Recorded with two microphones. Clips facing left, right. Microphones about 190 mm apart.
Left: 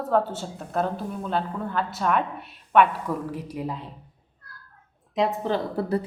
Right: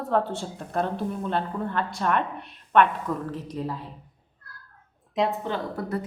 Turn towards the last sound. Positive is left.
turn(degrees=30)  # may be behind; listen again after turning